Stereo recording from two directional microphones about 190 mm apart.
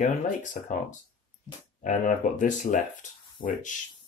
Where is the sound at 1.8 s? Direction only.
40° left (ahead or behind).